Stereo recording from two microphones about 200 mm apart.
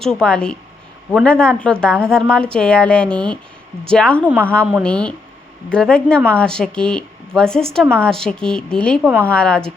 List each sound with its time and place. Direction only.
0.0 s speech: 5° left (ahead or behind)
4.2 s a woman's voice: 5° right (ahead or behind)
4.8 s speech: 5° left (ahead or behind)
9.0 s a woman's voice: 10° right (ahead or behind)
9.3 s speech: 5° left (ahead or behind)